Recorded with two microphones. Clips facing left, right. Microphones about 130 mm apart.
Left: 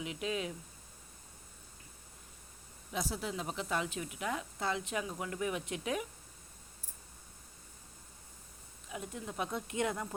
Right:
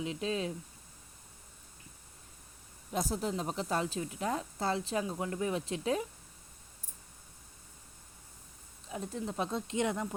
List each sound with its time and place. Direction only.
0.0 s a woman's voice: 30° right (ahead or behind)
2.9 s a woman's voice: 45° right (ahead or behind)
8.9 s speech: 30° right (ahead or behind)